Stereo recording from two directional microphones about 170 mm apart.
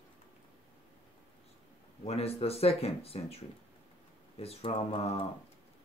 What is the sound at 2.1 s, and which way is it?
Speech, 35° left (ahead or behind).